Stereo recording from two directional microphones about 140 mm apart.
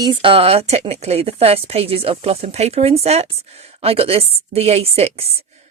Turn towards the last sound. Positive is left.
turn(degrees=-50)  # may be behind; listen again after turning